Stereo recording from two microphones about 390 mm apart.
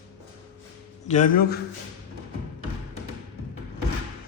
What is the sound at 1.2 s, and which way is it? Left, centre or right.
Speech, left.